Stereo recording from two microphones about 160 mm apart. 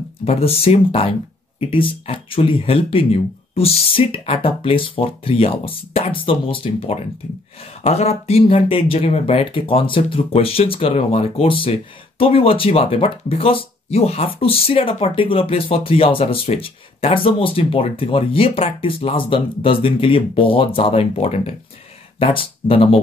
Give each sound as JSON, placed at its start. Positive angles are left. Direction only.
{"t": 0.2, "sound": "speech", "side_deg": 40}